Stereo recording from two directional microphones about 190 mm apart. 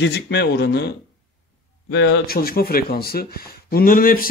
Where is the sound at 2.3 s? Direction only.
50° left (ahead or behind).